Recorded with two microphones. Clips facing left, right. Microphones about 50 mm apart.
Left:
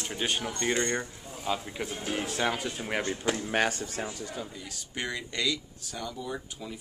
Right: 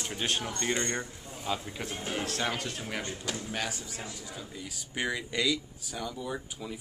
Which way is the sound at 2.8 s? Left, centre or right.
Left.